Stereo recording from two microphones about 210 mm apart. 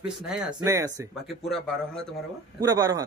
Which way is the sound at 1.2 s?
Centre (ahead or behind).